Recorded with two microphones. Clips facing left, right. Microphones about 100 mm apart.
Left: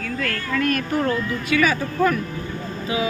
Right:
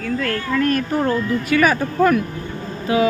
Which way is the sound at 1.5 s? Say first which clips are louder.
Right 3 dB; 45° right (ahead or behind).